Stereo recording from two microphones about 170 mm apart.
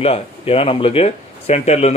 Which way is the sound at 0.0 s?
35° left (ahead or behind).